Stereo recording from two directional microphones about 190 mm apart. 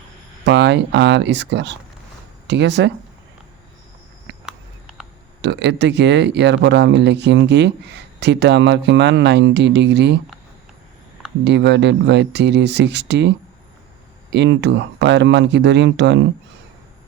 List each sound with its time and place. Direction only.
0.4 s speech: 65° right (ahead or behind)
4.4 s a sound: centre (ahead or behind)
5.4 s speech: 65° right (ahead or behind)
11.4 s speech: 65° right (ahead or behind)
14.3 s speech: 65° right (ahead or behind)